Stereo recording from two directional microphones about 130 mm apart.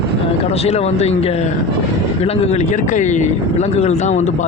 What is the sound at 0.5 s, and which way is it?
A man's voice, 50° left (ahead or behind).